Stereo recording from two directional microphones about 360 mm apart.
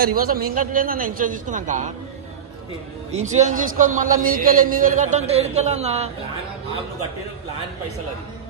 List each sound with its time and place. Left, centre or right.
0.0 s a man's voice: right
3.2 s a man's voice: centre